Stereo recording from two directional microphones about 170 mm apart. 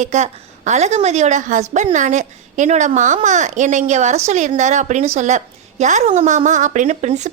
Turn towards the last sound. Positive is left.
turn(degrees=-40)  # may be behind; listen again after turning